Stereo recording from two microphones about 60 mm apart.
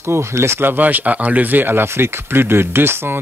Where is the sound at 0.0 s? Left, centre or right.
Right.